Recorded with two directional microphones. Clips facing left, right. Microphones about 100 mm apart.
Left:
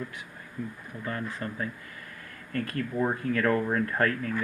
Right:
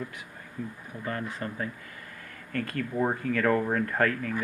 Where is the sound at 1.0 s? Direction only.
35° right (ahead or behind).